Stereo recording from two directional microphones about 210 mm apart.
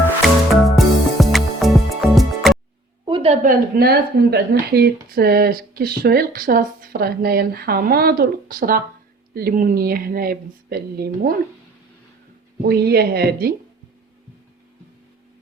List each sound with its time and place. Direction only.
0.8 s music: centre (ahead or behind)
3.0 s a sound: 25° right (ahead or behind)
3.4 s speech: 45° right (ahead or behind)
12.6 s speech: 50° right (ahead or behind)